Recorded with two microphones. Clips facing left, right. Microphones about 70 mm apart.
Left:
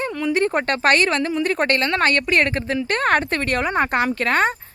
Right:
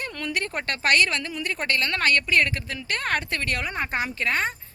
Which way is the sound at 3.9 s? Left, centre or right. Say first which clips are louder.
Left 7 dB; left.